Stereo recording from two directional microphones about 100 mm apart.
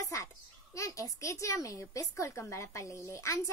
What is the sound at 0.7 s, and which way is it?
A child's voice, 35° left (ahead or behind).